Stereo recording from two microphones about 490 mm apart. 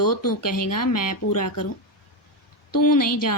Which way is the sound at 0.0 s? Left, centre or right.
Left.